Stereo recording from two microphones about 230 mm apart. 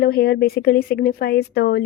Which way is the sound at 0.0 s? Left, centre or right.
Left.